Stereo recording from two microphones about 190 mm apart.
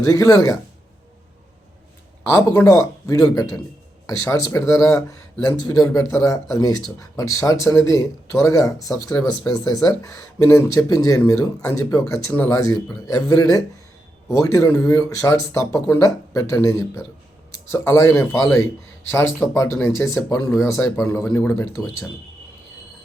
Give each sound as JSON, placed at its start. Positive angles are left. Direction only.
{"t": 0.0, "sound": "speech", "side_deg": 15}
{"t": 2.2, "sound": "speech", "side_deg": 10}